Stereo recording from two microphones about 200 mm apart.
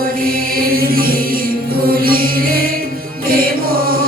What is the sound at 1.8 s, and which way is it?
Music, 50° right (ahead or behind).